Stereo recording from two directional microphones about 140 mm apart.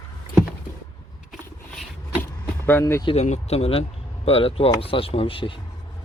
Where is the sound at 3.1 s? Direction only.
55° left (ahead or behind).